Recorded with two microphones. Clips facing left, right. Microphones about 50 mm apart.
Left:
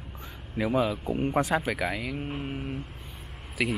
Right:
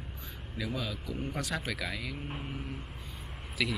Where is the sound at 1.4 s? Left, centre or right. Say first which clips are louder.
Left 9 dB; left.